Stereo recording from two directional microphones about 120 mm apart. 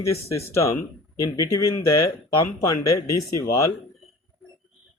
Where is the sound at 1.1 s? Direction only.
30° left (ahead or behind).